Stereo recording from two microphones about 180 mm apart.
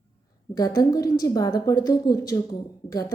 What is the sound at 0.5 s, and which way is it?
Speech, 20° left (ahead or behind).